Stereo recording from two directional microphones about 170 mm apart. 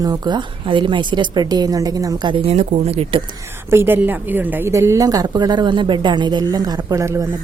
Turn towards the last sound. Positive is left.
turn(degrees=-20)  # may be behind; listen again after turning